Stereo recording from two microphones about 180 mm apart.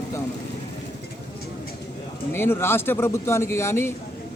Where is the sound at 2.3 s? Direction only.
15° left (ahead or behind).